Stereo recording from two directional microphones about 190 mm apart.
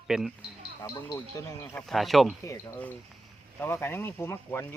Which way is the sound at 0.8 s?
15° left (ahead or behind).